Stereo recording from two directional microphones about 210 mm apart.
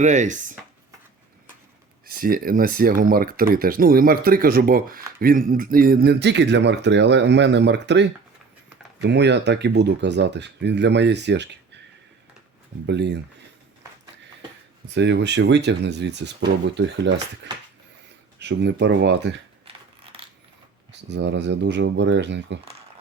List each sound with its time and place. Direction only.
0.0 s chopping: 35° right (ahead or behind)
2.0 s speech: 45° right (ahead or behind)
12.8 s speech: 55° right (ahead or behind)
14.9 s speech: 55° right (ahead or behind)
21.1 s speech: 55° right (ahead or behind)